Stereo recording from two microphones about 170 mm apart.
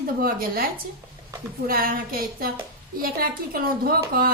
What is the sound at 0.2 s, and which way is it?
Speech, 60° right (ahead or behind).